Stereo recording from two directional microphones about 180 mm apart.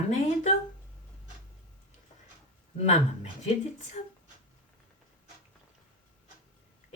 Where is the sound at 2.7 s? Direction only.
35° left (ahead or behind).